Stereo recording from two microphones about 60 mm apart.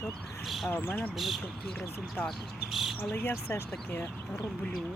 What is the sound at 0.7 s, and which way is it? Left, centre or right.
Speech, left.